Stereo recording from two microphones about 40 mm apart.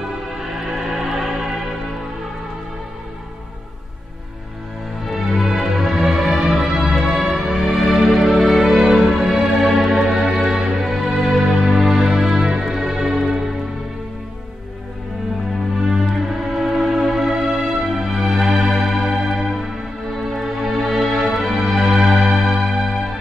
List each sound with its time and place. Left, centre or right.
0.4 s music: centre
5.0 s music: centre
15.9 s music: centre
18.7 s organ: centre
19.1 s music: centre